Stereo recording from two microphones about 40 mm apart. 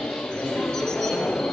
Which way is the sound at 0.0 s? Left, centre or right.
Centre.